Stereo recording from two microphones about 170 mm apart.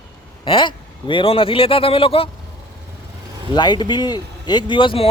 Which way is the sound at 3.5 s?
25° left (ahead or behind).